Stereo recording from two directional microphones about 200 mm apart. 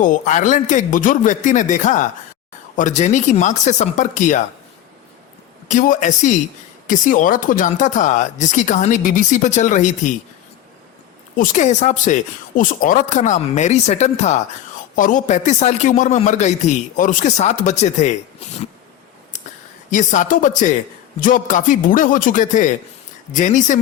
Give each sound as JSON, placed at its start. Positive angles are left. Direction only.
{"t": 0.0, "sound": "a man's voice", "side_deg": 40}
{"t": 5.6, "sound": "a man's voice", "side_deg": 40}
{"t": 11.3, "sound": "a man's voice", "side_deg": 35}
{"t": 19.9, "sound": "a man's voice", "side_deg": 40}